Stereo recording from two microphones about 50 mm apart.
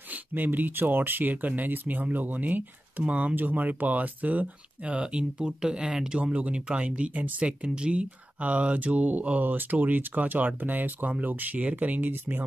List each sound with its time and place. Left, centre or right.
0.1 s speech: right
3.0 s speech: right
3.3 s speech: right